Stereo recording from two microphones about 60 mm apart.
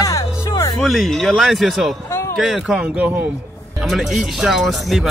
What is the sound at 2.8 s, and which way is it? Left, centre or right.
Speech, right.